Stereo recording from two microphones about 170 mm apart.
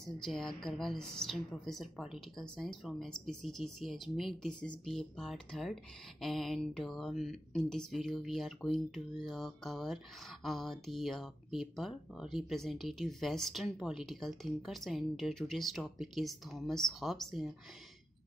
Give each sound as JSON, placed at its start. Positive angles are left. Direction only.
{"t": 0.0, "sound": "speech", "side_deg": 0}